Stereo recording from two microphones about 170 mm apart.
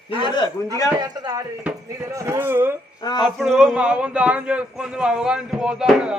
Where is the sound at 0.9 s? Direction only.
25° right (ahead or behind).